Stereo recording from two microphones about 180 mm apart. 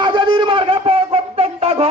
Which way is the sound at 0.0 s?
25° right (ahead or behind).